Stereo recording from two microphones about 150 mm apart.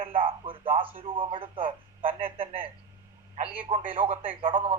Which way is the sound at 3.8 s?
10° right (ahead or behind).